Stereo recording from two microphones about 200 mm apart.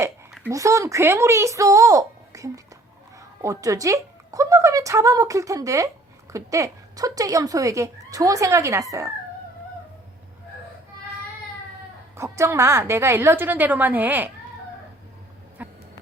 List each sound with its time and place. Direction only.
0.5 s speech: 15° right (ahead or behind)
12.1 s speech: 15° right (ahead or behind)